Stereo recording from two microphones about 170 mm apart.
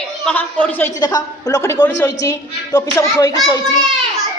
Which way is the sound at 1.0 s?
20° left (ahead or behind).